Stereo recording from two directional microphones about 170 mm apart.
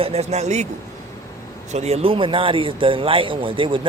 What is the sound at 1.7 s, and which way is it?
Speech, 40° right (ahead or behind).